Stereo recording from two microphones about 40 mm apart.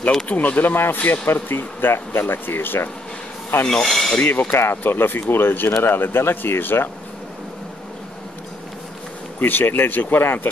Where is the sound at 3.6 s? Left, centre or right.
Centre.